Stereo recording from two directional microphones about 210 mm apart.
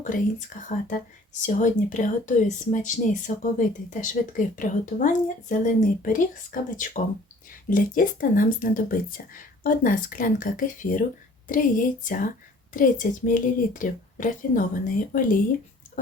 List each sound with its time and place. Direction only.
0.0 s speech: 40° left (ahead or behind)